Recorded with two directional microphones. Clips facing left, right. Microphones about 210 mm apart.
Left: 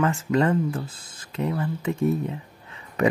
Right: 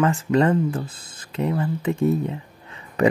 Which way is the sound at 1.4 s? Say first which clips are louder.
Right 3 dB; 25° right (ahead or behind).